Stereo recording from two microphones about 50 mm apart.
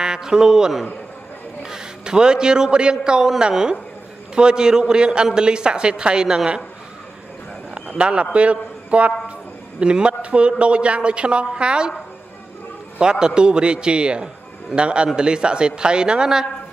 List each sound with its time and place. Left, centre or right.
0.0 s a man's voice: centre
7.7 s a man's voice: right
13.0 s a man's voice: centre